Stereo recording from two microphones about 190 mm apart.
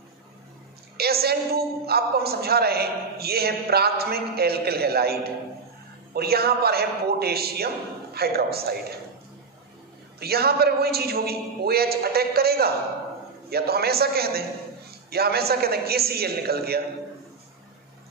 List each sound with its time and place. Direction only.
0.9 s a woman's voice: 55° right (ahead or behind)
10.2 s a woman's voice: 55° right (ahead or behind)